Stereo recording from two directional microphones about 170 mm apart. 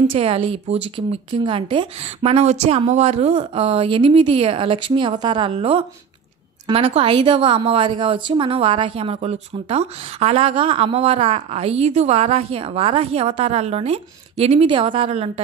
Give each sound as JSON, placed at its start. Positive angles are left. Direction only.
{"t": 0.0, "sound": "a woman's voice", "side_deg": -30}